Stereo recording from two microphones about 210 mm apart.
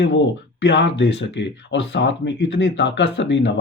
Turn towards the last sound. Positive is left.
turn(degrees=60)  # may be behind; listen again after turning